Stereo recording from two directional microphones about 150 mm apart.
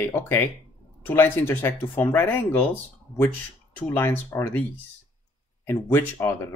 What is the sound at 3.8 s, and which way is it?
Speech, 15° left (ahead or behind).